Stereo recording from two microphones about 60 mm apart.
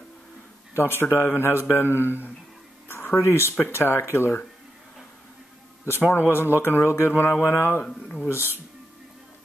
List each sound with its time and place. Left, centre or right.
0.7 s speech: left
3.2 s a man's voice: left
5.9 s a man's voice: left
7.8 s speech: centre